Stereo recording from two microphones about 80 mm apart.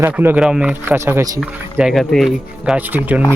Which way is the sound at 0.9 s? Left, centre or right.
Right.